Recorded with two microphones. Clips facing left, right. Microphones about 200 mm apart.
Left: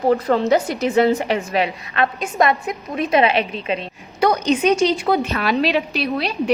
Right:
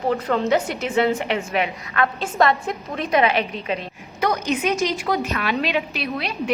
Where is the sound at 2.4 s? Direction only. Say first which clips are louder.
Left 1 dB; 20° left (ahead or behind).